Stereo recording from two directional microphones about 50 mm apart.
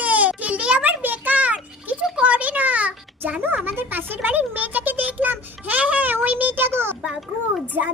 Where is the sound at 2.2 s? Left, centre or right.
Right.